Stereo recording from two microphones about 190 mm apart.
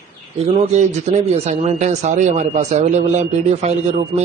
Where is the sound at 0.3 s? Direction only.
35° right (ahead or behind).